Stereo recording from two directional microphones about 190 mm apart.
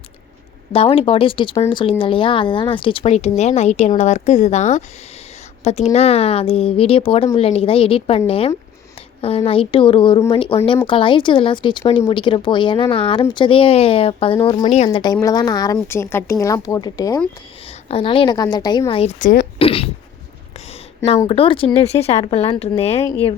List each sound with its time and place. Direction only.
0.7 s a woman's voice: 30° left (ahead or behind)
17.8 s a woman's voice: 30° left (ahead or behind)
19.2 s speech: 50° left (ahead or behind)
19.5 s speech: 30° left (ahead or behind)
21.2 s speech: 30° left (ahead or behind)